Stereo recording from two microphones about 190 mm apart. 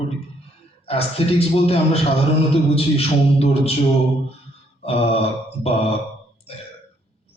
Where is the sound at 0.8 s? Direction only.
30° left (ahead or behind).